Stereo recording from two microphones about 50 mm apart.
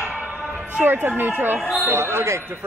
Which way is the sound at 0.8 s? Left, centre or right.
Right.